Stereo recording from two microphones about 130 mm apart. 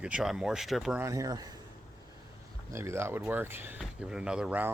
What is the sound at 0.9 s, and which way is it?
Speech, 25° right (ahead or behind).